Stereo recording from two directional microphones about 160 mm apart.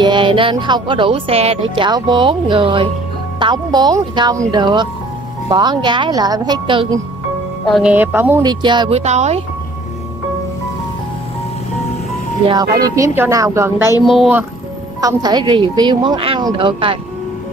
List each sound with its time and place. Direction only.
0.0 s speech: 30° right (ahead or behind)
1.9 s speech: 25° right (ahead or behind)
7.7 s speech: 10° right (ahead or behind)
8.4 s speech: 25° right (ahead or behind)
9.0 s speech: 45° right (ahead or behind)
12.4 s speech: 25° right (ahead or behind)
14.0 s a woman's voice: centre (ahead or behind)
15.0 s speech: 25° right (ahead or behind)